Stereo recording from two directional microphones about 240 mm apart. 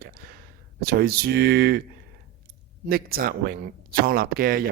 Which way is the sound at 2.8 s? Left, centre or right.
Right.